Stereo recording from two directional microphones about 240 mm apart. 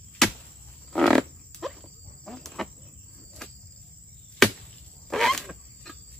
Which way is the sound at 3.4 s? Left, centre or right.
Centre.